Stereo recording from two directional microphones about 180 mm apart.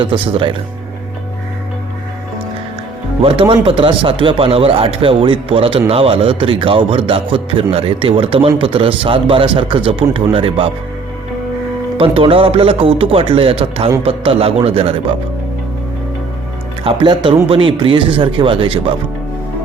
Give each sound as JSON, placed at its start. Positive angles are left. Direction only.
{"t": 0.0, "sound": "a man's voice", "side_deg": -30}
{"t": 3.2, "sound": "a man's voice", "side_deg": -30}
{"t": 11.9, "sound": "speech", "side_deg": -30}
{"t": 16.8, "sound": "a man's voice", "side_deg": -30}